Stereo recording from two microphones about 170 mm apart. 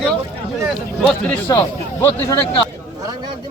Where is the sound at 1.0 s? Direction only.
5° left (ahead or behind).